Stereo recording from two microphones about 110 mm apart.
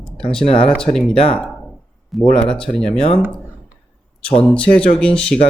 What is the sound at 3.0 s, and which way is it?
Speech, 55° left (ahead or behind).